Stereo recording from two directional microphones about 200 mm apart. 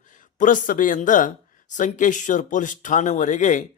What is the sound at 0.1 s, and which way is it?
Speech, 40° left (ahead or behind).